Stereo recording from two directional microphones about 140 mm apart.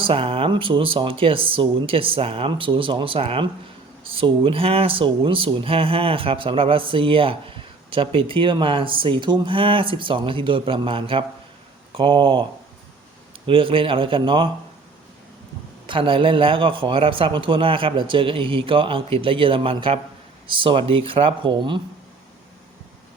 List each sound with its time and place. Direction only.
0.0 s speech: 40° right (ahead or behind)
13.5 s speech: 40° right (ahead or behind)
15.9 s speech: 35° right (ahead or behind)